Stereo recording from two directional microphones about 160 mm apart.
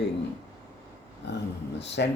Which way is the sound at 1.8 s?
90° left.